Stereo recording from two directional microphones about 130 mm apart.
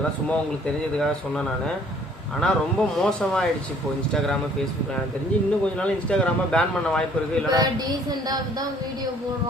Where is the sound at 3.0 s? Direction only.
5° left (ahead or behind).